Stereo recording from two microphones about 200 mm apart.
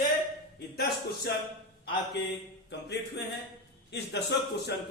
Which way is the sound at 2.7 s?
55° left (ahead or behind).